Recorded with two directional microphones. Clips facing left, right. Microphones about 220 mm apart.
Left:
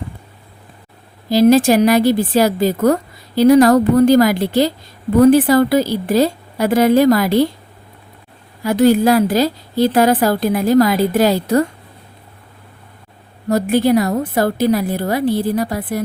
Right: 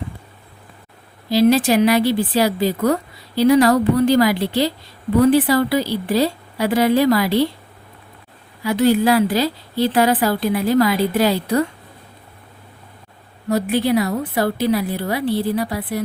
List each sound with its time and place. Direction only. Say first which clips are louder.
1.3 s a woman's voice: left 4 dB; 45° left (ahead or behind)
8.6 s a woman's voice: left 3 dB; 45° left (ahead or behind)
13.5 s a woman's voice: left 4 dB; 45° left (ahead or behind)